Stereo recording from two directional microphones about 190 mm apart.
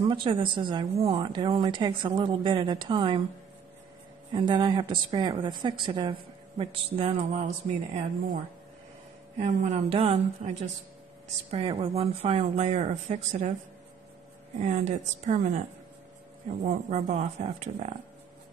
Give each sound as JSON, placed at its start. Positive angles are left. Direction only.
{"t": 0.0, "sound": "speech", "side_deg": -25}
{"t": 4.3, "sound": "speech", "side_deg": -25}
{"t": 9.4, "sound": "speech", "side_deg": -35}
{"t": 14.6, "sound": "speech", "side_deg": -35}
{"t": 16.6, "sound": "speech", "side_deg": -35}